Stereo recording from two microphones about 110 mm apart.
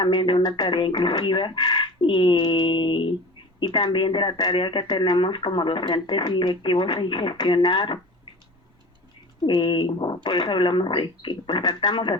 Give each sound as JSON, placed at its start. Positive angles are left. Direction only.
{"t": 0.0, "sound": "speech", "side_deg": 50}
{"t": 9.5, "sound": "speech", "side_deg": 45}